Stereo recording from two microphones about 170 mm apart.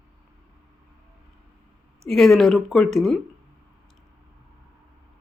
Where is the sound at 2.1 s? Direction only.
Centre (ahead or behind).